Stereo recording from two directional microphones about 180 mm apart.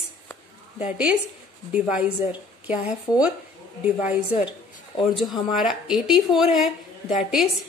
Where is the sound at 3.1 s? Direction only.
20° left (ahead or behind).